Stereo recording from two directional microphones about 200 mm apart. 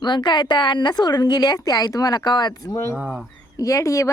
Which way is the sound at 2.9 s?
10° right (ahead or behind).